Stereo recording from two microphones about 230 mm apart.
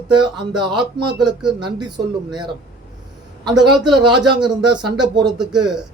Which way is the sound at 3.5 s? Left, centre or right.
Centre.